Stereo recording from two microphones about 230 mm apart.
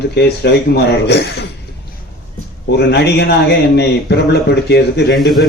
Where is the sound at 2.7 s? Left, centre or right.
Left.